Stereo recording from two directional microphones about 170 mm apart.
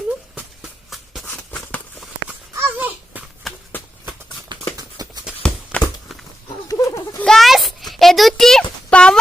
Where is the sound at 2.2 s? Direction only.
10° right (ahead or behind).